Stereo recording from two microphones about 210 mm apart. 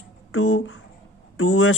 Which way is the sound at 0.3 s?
70° left (ahead or behind).